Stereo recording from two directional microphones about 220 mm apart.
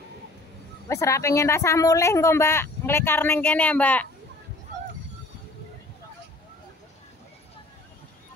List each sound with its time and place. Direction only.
0.8 s a woman's voice: 15° left (ahead or behind)